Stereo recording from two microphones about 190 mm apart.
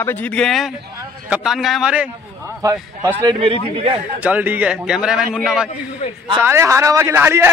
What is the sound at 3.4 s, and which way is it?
Speech, 30° right (ahead or behind).